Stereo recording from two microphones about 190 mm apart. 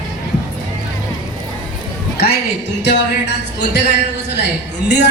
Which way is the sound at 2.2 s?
60° left (ahead or behind).